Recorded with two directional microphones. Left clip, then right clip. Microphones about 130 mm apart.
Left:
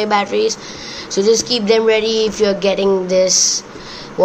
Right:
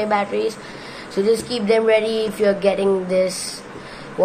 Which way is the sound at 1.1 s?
15° left (ahead or behind).